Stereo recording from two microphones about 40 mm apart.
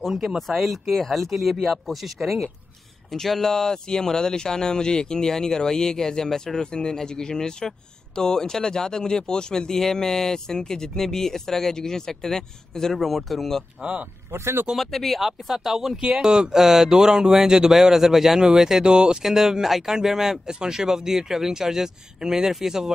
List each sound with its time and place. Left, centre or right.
0.0 s speech: centre
12.9 s speech: centre
14.3 s speech: right
14.8 s speech: centre